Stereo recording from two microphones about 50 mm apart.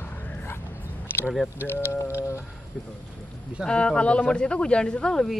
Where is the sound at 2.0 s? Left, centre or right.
Left.